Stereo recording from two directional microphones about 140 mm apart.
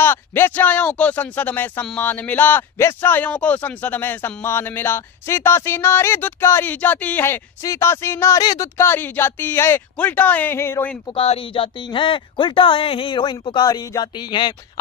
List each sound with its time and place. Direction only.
0.0 s a man's voice: 15° left (ahead or behind)
11.1 s speech: 40° left (ahead or behind)